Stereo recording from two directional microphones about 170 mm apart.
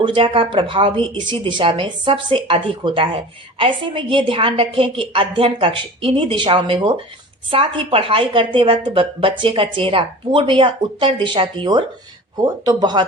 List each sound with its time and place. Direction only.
0.0 s a woman's voice: 30° right (ahead or behind)